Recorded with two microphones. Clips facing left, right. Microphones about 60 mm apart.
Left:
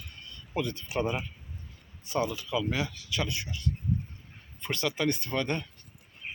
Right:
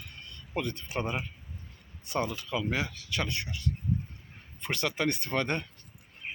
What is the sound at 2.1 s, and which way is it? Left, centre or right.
Speech, right.